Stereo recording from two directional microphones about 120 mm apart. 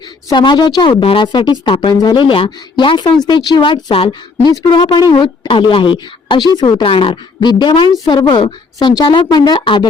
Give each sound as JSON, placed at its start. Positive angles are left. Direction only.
{"t": 0.3, "sound": "speech", "side_deg": 35}